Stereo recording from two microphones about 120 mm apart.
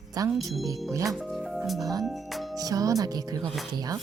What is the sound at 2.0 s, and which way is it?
Speech, centre (ahead or behind).